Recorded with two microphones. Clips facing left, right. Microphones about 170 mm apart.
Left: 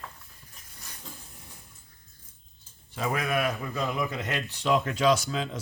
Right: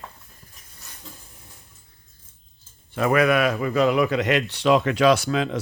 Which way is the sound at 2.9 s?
70° right (ahead or behind).